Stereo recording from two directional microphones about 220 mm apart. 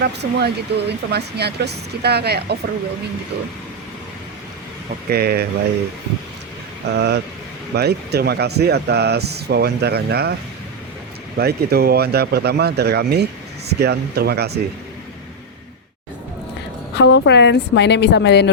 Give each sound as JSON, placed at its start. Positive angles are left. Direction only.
{"t": 0.0, "sound": "speech", "side_deg": -50}
{"t": 5.0, "sound": "speech", "side_deg": -45}
{"t": 6.9, "sound": "speech", "side_deg": -50}
{"t": 11.3, "sound": "speech", "side_deg": -45}
{"t": 16.9, "sound": "a woman's voice", "side_deg": 55}